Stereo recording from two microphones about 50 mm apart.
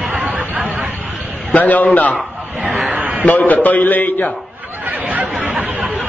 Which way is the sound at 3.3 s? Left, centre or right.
Left.